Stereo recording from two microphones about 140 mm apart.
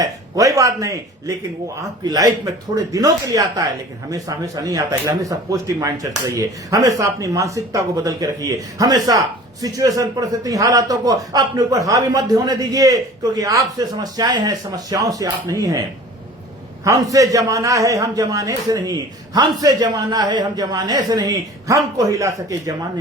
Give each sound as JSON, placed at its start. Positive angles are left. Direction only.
{"t": 0.0, "sound": "speech", "side_deg": -25}
{"t": 16.8, "sound": "speech", "side_deg": -25}